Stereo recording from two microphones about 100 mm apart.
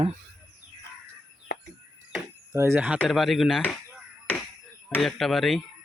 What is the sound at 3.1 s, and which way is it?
Speech, centre (ahead or behind).